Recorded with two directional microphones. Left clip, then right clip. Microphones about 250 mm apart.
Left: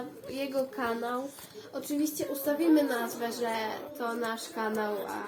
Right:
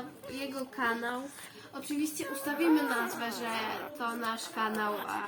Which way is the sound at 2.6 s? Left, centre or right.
Right.